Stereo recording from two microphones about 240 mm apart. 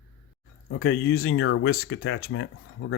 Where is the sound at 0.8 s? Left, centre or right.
Left.